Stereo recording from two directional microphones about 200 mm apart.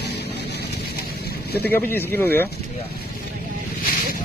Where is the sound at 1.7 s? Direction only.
10° left (ahead or behind).